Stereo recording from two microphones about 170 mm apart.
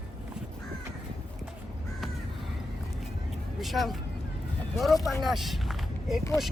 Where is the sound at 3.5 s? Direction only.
Centre (ahead or behind).